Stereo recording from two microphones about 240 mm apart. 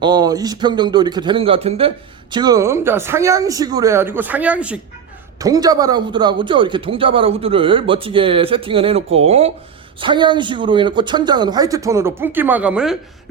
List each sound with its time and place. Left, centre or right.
0.0 s speech: centre